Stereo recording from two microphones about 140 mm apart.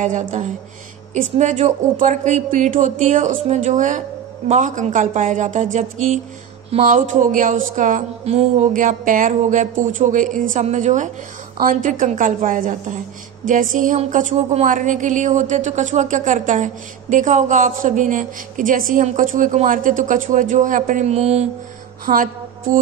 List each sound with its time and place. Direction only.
0.0 s speech: 60° right (ahead or behind)
11.6 s speech: 70° right (ahead or behind); by 21.5 s 50° right (ahead or behind)
22.0 s music: 75° right (ahead or behind)